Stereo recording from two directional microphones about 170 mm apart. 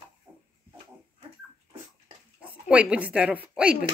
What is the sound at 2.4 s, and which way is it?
Speech, 5° right (ahead or behind).